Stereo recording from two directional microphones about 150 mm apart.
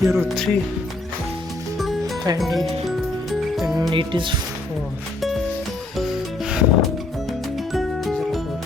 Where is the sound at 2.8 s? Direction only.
Centre (ahead or behind).